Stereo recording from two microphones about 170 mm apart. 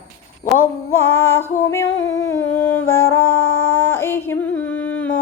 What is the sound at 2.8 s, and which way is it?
A woman's voice, 15° left (ahead or behind).